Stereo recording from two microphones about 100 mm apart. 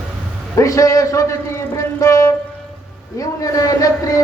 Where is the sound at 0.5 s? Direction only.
35° left (ahead or behind).